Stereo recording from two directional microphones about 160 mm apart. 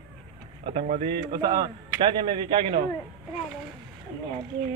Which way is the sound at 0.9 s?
40° right (ahead or behind).